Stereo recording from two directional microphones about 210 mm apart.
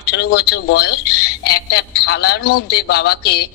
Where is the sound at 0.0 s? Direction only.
50° left (ahead or behind).